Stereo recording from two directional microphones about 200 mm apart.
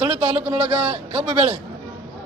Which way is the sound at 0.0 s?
30° right (ahead or behind).